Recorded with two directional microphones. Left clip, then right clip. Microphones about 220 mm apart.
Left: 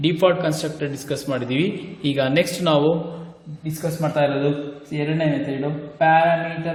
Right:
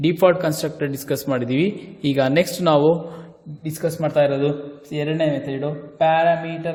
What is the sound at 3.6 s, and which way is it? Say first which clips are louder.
Speech: right 2 dB; 50° right (ahead or behind).